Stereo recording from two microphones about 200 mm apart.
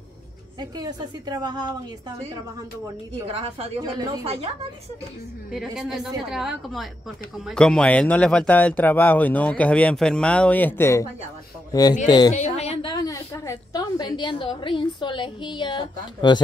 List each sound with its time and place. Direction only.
0.6 s a woman's voice: 20° right (ahead or behind)
3.3 s a woman's voice: 30° right (ahead or behind)
5.5 s a woman's voice: centre (ahead or behind)
12.1 s a woman's voice: 20° left (ahead or behind)
12.4 s a woman's voice: 35° left (ahead or behind)
12.9 s a woman's voice: 15° left (ahead or behind)